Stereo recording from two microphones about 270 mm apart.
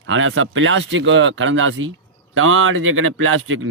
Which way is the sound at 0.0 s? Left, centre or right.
Right.